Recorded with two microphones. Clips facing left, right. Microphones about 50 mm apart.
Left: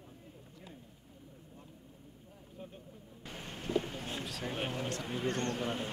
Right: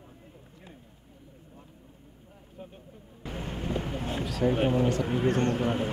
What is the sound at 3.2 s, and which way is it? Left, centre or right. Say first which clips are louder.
Vehicle: right 7 dB; right.